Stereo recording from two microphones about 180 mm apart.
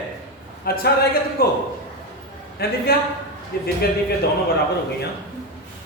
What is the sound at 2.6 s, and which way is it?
Speech, 55° left (ahead or behind).